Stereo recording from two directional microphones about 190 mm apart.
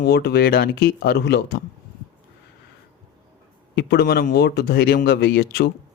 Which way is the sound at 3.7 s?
60° left (ahead or behind).